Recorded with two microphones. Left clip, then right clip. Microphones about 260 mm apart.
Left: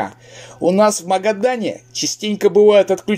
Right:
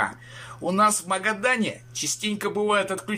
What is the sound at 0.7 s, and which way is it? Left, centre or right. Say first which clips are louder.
Speech: left 8 dB; centre.